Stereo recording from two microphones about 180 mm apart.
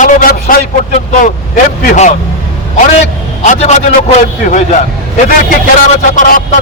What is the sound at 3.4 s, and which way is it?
A man's voice, 40° left (ahead or behind).